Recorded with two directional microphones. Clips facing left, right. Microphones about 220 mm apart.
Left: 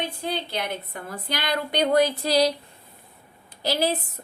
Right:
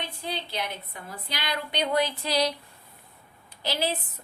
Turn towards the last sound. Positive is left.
turn(degrees=40)  # may be behind; listen again after turning